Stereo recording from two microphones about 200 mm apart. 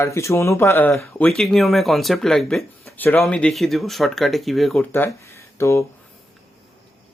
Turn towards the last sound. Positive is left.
turn(degrees=15)  # may be behind; listen again after turning